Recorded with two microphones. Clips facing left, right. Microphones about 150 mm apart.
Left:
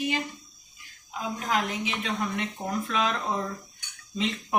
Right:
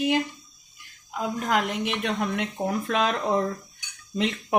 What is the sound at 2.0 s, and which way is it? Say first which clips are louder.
Speech: right 3 dB; 65° right (ahead or behind).